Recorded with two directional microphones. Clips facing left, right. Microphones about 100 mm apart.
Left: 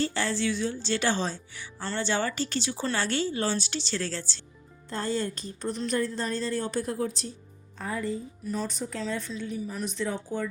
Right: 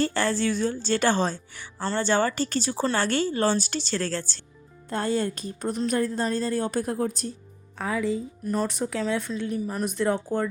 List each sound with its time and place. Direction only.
0.0 s speech: 55° right (ahead or behind)
7.8 s speech: 90° right
8.4 s speech: 60° right (ahead or behind)